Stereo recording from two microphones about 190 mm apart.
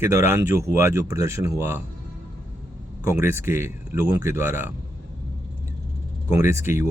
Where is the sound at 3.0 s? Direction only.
15° right (ahead or behind).